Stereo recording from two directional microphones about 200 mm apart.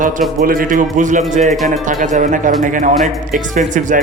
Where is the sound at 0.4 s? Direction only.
45° right (ahead or behind).